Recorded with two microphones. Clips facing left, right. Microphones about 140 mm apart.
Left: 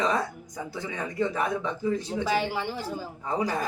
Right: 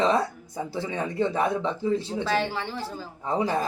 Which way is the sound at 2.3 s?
15° left (ahead or behind).